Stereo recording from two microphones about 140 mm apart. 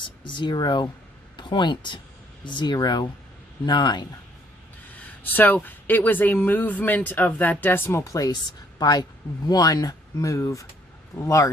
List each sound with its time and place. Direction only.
0.3 s speech: 35° left (ahead or behind)
4.9 s speech: 10° left (ahead or behind)